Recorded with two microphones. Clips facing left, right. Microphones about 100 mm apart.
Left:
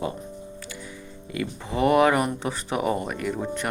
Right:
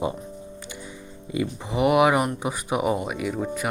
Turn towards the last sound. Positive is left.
turn(degrees=-5)  # may be behind; listen again after turning